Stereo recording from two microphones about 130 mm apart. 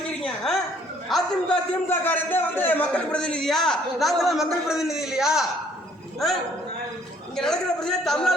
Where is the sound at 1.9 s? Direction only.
15° left (ahead or behind).